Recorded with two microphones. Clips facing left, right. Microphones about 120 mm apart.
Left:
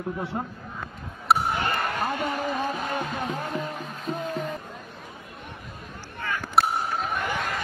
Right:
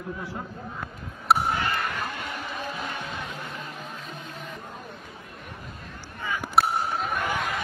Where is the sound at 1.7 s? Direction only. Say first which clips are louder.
Left 3 dB; 40° left (ahead or behind).